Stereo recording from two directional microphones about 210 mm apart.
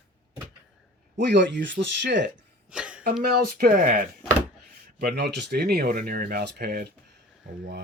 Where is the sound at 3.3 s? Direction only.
45° right (ahead or behind).